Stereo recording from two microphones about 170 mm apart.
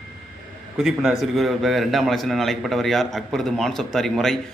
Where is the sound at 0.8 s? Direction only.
Centre (ahead or behind).